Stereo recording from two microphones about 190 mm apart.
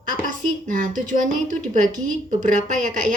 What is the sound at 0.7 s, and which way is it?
A woman's voice, 40° right (ahead or behind).